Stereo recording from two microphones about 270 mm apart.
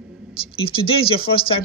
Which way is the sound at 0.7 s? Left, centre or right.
Centre.